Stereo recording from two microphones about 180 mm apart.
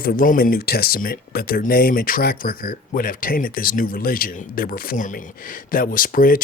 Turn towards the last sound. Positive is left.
turn(degrees=50)  # may be behind; listen again after turning